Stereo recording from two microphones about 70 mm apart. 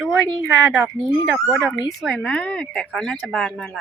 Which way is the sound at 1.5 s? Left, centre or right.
Centre.